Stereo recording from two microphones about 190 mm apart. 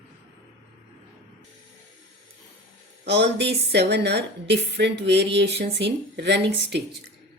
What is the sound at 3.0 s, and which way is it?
A woman's voice, 65° right (ahead or behind).